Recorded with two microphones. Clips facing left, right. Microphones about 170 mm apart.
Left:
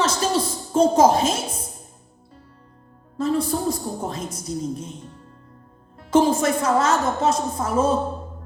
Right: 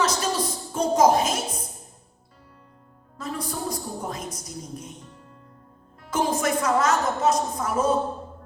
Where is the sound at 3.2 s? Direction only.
30° left (ahead or behind).